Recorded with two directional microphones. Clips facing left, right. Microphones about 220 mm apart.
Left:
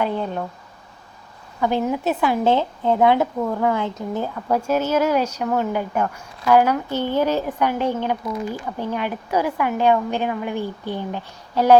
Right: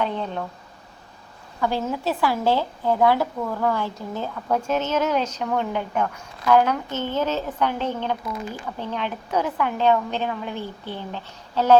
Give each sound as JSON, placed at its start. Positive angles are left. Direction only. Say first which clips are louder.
{"t": 0.0, "sound": "a woman's voice", "louder": "left 3 dB", "side_deg": 5}
{"t": 1.6, "sound": "a woman's voice", "louder": "left 4 dB", "side_deg": 15}